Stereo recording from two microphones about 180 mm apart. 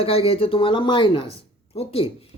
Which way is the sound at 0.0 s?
30° left (ahead or behind).